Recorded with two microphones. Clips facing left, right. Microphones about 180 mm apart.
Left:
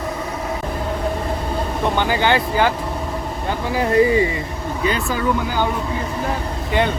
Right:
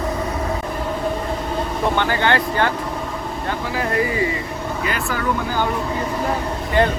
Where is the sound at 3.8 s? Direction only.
25° left (ahead or behind).